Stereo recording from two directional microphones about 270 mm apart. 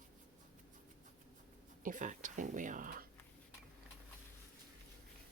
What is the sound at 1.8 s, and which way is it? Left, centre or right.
Speech, right.